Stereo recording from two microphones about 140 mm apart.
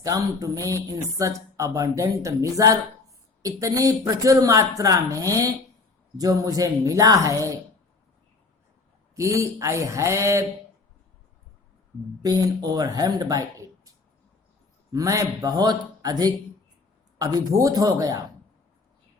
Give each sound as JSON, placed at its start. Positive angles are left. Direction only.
{"t": 0.0, "sound": "speech", "side_deg": -25}
{"t": 9.1, "sound": "speech", "side_deg": -20}
{"t": 12.2, "sound": "speech", "side_deg": -25}
{"t": 14.9, "sound": "speech", "side_deg": -25}